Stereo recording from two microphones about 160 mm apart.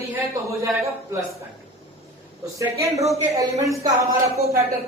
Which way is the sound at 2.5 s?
20° right (ahead or behind).